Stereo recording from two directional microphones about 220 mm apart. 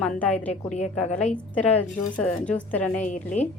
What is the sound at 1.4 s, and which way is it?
A woman's voice, 5° left (ahead or behind).